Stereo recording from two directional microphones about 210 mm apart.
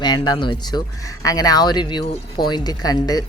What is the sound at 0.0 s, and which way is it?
Speech, 20° left (ahead or behind).